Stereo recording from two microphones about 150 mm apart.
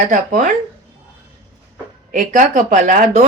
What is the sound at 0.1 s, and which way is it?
Speech, 60° right (ahead or behind).